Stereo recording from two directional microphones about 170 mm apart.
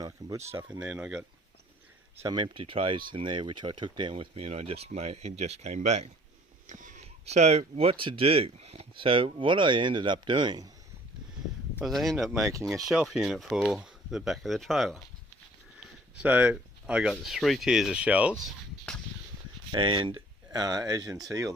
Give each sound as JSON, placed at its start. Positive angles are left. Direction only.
{"t": 0.0, "sound": "a sound", "side_deg": -20}
{"t": 0.5, "sound": "speech", "side_deg": -10}
{"t": 2.2, "sound": "speech", "side_deg": -30}
{"t": 11.8, "sound": "speech", "side_deg": 0}
{"t": 16.1, "sound": "speech", "side_deg": -10}
{"t": 19.7, "sound": "speech", "side_deg": -30}